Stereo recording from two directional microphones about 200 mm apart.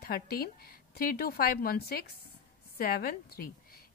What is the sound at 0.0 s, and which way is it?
A woman's voice, 50° left (ahead or behind).